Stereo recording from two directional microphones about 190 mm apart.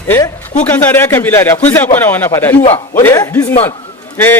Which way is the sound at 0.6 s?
10° left (ahead or behind).